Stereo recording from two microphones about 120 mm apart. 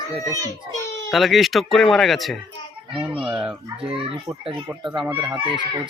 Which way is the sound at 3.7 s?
50° right (ahead or behind).